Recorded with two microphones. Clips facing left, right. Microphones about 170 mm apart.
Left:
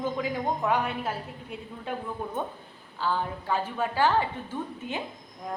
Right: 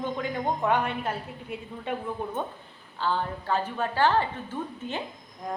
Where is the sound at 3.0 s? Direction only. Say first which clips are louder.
Right 1 dB; 10° left (ahead or behind).